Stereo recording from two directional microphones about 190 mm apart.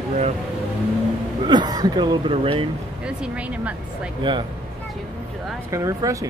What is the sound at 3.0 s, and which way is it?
Speech, 5° right (ahead or behind).